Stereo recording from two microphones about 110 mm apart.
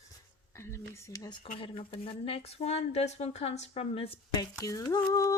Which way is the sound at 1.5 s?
55° left (ahead or behind).